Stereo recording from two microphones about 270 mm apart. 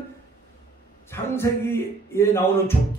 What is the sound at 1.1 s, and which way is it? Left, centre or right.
Speech, centre.